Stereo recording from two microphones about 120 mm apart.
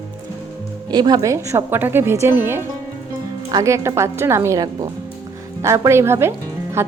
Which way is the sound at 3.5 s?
30° right (ahead or behind).